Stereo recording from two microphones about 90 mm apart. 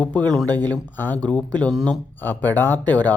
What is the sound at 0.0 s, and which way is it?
Speech, 15° left (ahead or behind).